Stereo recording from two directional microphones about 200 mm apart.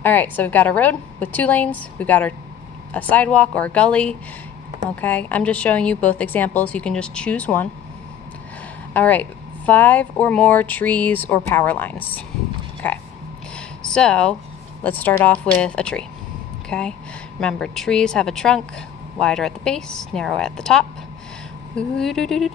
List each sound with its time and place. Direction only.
0.0 s speech: 10° left (ahead or behind)
8.9 s speech: 10° left (ahead or behind)
13.6 s a sound: 5° left (ahead or behind)
14.8 s a woman's voice: 10° left (ahead or behind)